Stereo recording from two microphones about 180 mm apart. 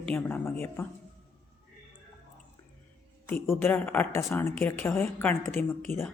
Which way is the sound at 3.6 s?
10° left (ahead or behind).